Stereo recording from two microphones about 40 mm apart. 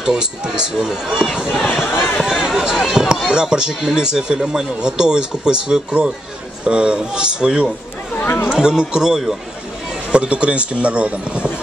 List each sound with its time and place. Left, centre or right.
0.0 s speech: centre
1.9 s speech: left
2.1 s speech: centre
5.9 s a man's voice: right
8.2 s chatter: left
8.5 s speech: centre
10.1 s speech: right